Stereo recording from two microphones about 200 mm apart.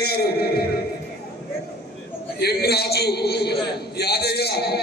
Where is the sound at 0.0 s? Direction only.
50° left (ahead or behind).